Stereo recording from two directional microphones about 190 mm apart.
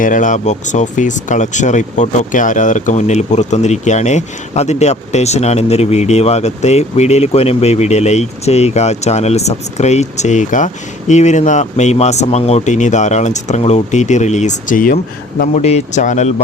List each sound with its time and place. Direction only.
0.0 s speech: 45° left (ahead or behind)